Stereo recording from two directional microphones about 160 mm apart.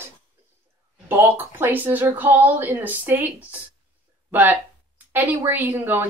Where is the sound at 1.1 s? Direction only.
15° right (ahead or behind).